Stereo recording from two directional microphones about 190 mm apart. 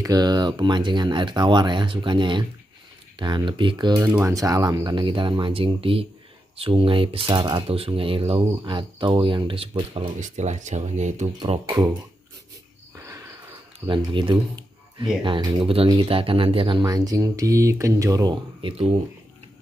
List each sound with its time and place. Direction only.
0.0 s speech: 20° right (ahead or behind)
10.2 s speech: 40° right (ahead or behind)
12.9 s cricket: 15° right (ahead or behind)
13.7 s speech: 25° right (ahead or behind)